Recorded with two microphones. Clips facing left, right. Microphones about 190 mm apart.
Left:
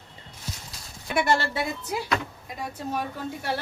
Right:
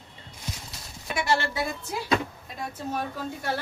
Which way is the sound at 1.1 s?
55° left (ahead or behind).